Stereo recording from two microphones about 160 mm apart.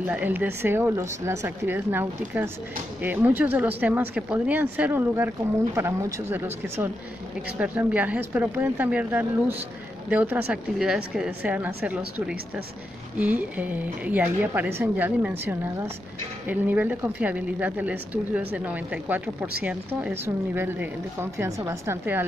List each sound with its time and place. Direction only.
0.0 s a woman's voice: 10° right (ahead or behind)